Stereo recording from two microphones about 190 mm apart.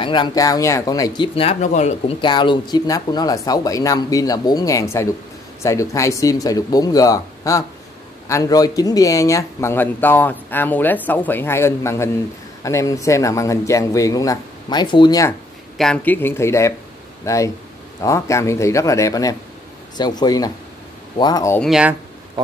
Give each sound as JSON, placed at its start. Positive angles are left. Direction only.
{"t": 0.0, "sound": "speech", "side_deg": 25}
{"t": 2.2, "sound": "speech", "side_deg": 25}
{"t": 15.8, "sound": "speech", "side_deg": 5}
{"t": 21.5, "sound": "speech", "side_deg": 0}